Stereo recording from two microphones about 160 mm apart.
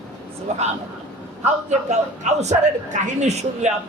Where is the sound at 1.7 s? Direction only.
45° right (ahead or behind).